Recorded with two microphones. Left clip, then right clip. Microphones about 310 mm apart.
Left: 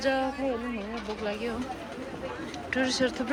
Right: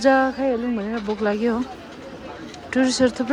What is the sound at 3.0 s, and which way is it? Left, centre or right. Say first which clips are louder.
Speech: right 11 dB; centre.